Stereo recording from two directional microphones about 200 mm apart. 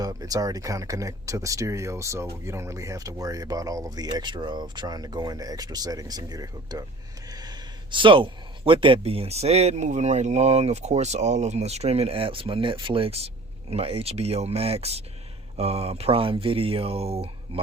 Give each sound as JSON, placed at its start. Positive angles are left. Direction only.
{"t": 0.0, "sound": "speech", "side_deg": -20}